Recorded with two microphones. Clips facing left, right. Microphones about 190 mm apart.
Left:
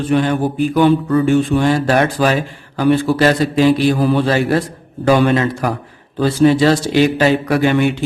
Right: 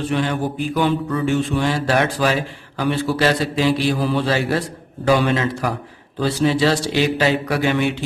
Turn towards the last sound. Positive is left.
turn(degrees=55)  # may be behind; listen again after turning